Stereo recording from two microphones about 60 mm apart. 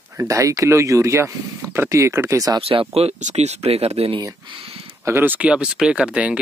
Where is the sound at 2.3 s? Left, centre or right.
Right.